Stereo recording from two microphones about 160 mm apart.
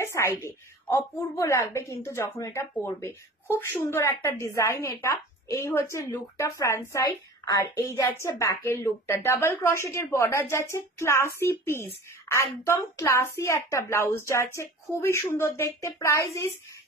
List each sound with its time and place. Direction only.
0.0 s a woman's voice: 15° left (ahead or behind)